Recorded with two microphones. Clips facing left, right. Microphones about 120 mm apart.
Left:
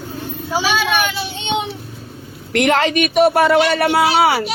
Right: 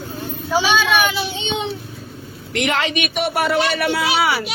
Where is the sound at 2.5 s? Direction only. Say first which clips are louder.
Left 6 dB; 50° left (ahead or behind).